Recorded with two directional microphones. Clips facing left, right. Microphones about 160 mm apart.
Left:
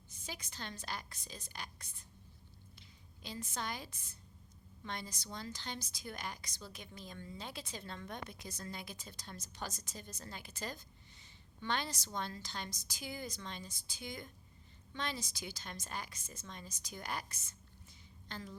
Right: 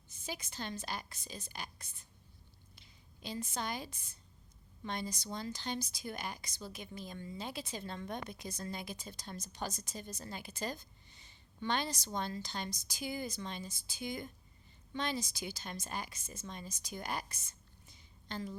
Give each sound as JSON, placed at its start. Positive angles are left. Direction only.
{"t": 0.3, "sound": "a woman's voice", "side_deg": -10}
{"t": 3.2, "sound": "a woman's voice", "side_deg": -15}
{"t": 18.3, "sound": "a woman's voice", "side_deg": -20}